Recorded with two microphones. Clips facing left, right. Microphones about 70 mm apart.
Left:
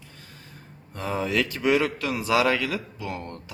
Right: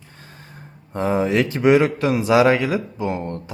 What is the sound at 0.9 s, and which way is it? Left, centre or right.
Speech, right.